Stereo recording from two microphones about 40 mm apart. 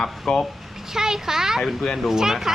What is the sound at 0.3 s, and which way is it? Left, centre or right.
Speech, left.